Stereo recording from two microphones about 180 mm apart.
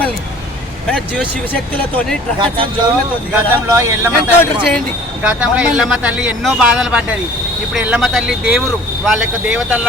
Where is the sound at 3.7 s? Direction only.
15° right (ahead or behind).